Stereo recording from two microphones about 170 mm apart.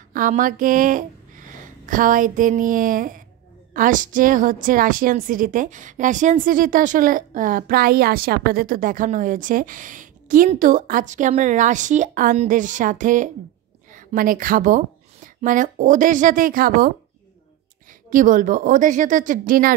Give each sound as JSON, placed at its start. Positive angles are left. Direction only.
{"t": 0.1, "sound": "a woman's voice", "side_deg": -55}
{"t": 18.1, "sound": "a woman's voice", "side_deg": -50}